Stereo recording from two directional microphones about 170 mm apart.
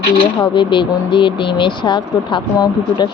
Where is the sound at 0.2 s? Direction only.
30° left (ahead or behind).